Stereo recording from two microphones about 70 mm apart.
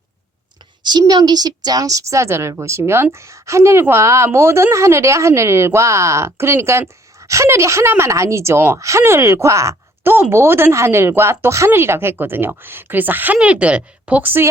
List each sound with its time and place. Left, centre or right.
0.8 s a woman's voice: right
10.0 s speech: right